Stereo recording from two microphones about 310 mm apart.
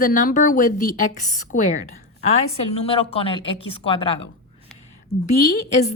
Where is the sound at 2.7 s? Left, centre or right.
Centre.